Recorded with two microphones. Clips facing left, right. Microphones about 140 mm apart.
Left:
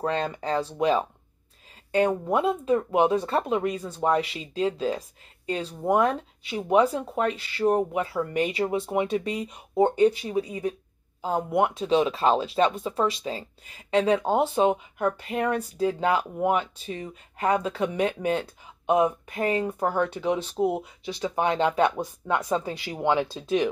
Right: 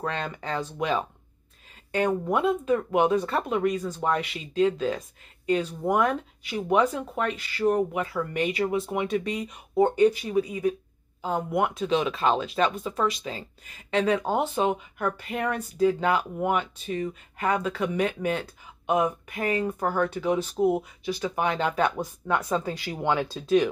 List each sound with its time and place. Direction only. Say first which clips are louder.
0.0 s speech: left 4 dB; 35° left (ahead or behind)